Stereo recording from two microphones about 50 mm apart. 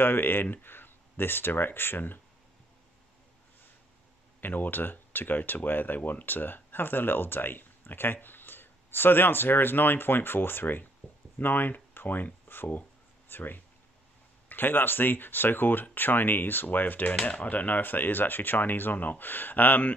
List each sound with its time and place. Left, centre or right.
0.0 s speech: left
4.4 s speech: left